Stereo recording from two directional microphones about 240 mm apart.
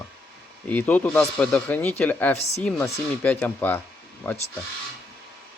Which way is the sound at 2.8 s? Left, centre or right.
Centre.